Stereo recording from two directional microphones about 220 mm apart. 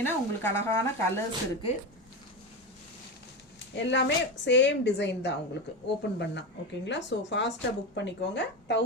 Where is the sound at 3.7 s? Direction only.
55° left (ahead or behind).